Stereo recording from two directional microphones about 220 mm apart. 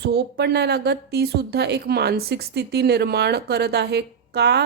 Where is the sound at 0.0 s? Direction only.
50° right (ahead or behind).